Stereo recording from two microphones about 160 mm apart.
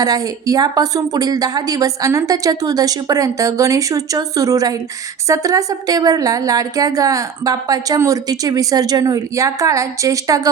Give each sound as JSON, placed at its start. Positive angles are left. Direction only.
{"t": 0.0, "sound": "a woman's voice", "side_deg": -25}